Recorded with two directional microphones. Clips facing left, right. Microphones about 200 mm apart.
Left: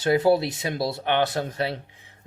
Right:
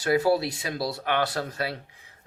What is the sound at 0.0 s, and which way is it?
Speech, 25° left (ahead or behind).